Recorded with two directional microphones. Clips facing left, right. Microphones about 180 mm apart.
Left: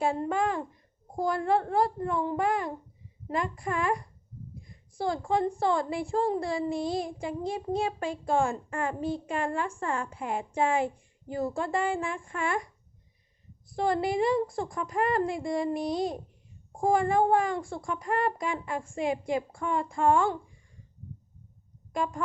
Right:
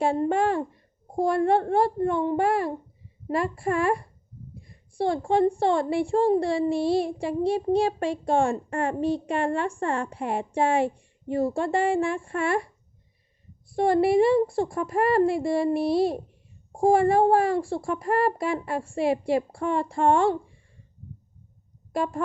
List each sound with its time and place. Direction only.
0.0 s a woman's voice: 30° right (ahead or behind)
6.8 s child singing: 65° right (ahead or behind)
7.9 s a woman's voice: 30° right (ahead or behind)
9.0 s a woman's voice: 70° right (ahead or behind)
9.4 s a woman's voice: 30° right (ahead or behind)
16.7 s speech: 30° right (ahead or behind)
21.9 s speech: 35° right (ahead or behind)